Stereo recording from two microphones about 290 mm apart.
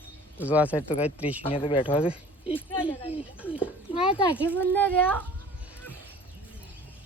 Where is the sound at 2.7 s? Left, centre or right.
Centre.